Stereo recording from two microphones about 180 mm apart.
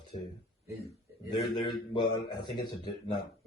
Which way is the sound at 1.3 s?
25° left (ahead or behind).